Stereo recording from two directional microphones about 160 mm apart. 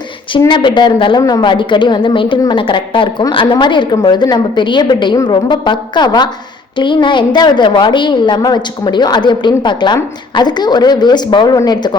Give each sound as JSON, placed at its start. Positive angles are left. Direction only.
{"t": 0.3, "sound": "a woman's voice", "side_deg": 30}